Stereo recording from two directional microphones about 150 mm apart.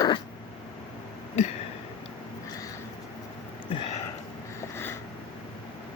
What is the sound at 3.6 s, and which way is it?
Sniff, 35° left (ahead or behind).